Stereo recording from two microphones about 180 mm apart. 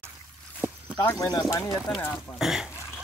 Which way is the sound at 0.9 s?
15° left (ahead or behind).